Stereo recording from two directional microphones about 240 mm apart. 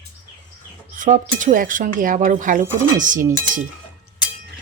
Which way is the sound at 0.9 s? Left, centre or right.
Right.